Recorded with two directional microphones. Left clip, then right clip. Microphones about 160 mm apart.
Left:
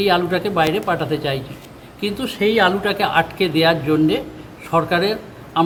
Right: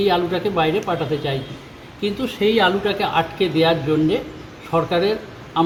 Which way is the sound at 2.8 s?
25° left (ahead or behind).